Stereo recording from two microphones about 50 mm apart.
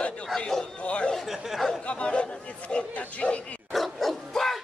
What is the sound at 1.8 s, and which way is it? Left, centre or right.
Speech, left.